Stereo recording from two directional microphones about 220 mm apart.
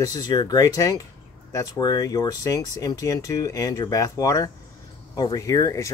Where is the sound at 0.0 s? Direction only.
15° left (ahead or behind).